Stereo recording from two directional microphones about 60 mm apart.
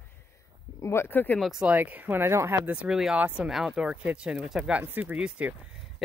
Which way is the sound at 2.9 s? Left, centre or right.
Centre.